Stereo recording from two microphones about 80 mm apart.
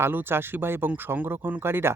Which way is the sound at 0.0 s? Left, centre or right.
Right.